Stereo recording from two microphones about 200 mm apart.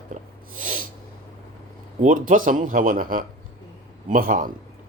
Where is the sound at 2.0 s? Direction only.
40° right (ahead or behind).